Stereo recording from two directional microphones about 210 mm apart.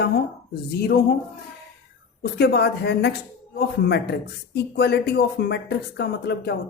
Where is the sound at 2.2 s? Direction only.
50° left (ahead or behind).